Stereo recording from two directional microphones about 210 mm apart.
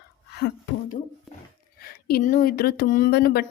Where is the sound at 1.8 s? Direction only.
45° left (ahead or behind).